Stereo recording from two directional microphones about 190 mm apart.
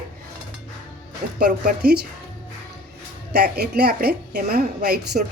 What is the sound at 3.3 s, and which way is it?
A woman's voice, 55° right (ahead or behind).